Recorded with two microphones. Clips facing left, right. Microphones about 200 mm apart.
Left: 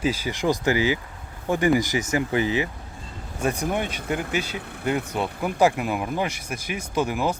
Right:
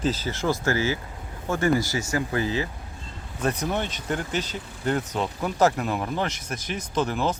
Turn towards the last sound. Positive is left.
turn(degrees=10)  # may be behind; listen again after turning